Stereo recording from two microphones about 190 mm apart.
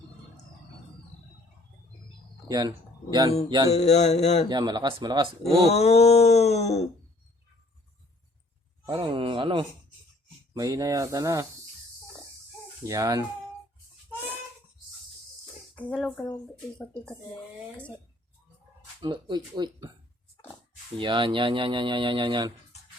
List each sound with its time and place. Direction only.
2.5 s speech: 20° right (ahead or behind)
3.7 s a sound: 35° left (ahead or behind)
4.4 s speech: 20° right (ahead or behind)
5.6 s a sound: 35° left (ahead or behind)
8.9 s speech: 25° right (ahead or behind)
12.8 s speech: 15° right (ahead or behind)
15.7 s speech: 10° left (ahead or behind)
19.0 s speech: 25° right (ahead or behind)
21.0 s speech: 25° right (ahead or behind)